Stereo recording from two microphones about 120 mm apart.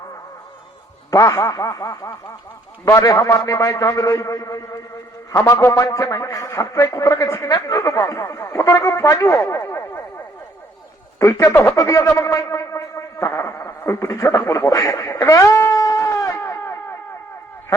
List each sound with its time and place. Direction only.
1.1 s a man's voice: 25° left (ahead or behind)
11.2 s a man's voice: 25° left (ahead or behind)
15.1 s a sound: 30° left (ahead or behind)